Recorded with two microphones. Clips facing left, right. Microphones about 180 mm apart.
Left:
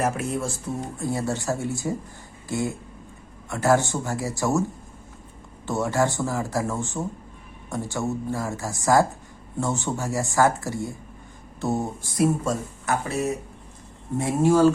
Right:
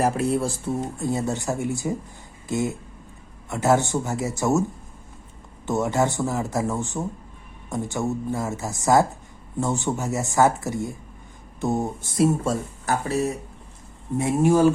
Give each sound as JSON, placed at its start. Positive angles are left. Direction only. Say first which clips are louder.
{"t": 0.0, "sound": "speech", "louder": "right 4 dB", "side_deg": -35}
{"t": 1.1, "sound": "speech", "louder": "even", "side_deg": -20}
{"t": 5.6, "sound": "speech", "louder": "right 1 dB", "side_deg": -20}
{"t": 14.2, "sound": "speech", "louder": "even", "side_deg": -15}